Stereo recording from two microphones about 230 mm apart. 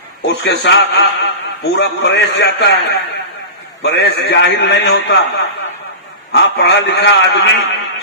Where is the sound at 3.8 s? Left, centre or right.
Left.